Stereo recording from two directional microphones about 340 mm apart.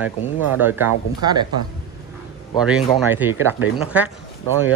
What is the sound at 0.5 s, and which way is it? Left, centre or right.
Speech, centre.